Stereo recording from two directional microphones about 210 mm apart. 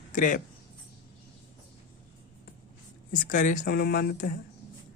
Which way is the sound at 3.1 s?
40° left (ahead or behind).